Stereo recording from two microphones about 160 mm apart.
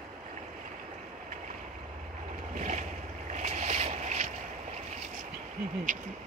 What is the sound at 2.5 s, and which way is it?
Boat, 50° right (ahead or behind).